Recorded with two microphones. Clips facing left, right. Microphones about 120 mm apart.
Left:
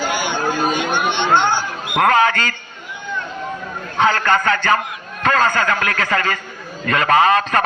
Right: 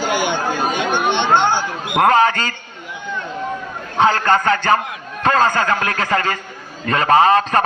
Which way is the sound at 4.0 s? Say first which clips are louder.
Right 1 dB; 35° right (ahead or behind).